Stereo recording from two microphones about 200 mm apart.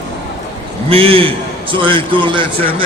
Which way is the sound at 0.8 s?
30° right (ahead or behind).